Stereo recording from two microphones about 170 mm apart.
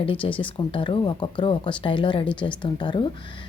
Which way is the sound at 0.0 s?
30° left (ahead or behind).